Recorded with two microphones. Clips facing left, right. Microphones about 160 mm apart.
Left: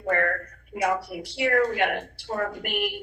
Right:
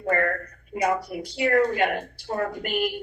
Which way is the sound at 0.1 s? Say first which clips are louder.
Right 1 dB; 5° right (ahead or behind).